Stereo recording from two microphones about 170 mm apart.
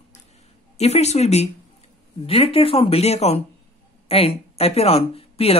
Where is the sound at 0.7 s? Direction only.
40° left (ahead or behind).